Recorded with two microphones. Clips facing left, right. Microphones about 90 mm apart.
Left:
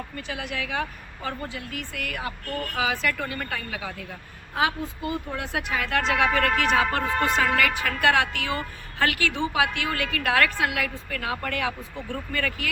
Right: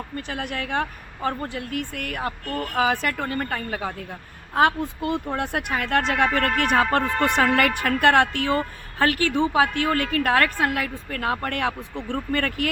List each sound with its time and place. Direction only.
0.2 s speech: 55° right (ahead or behind)
4.5 s a woman's voice: 55° right (ahead or behind)